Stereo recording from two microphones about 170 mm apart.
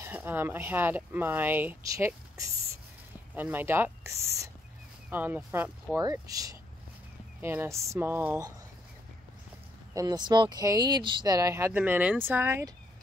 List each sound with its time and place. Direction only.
0.0 s speech: 10° right (ahead or behind)
9.9 s speech: 25° right (ahead or behind)